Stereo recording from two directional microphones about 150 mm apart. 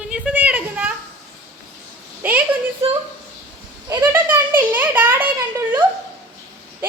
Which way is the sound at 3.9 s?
15° right (ahead or behind).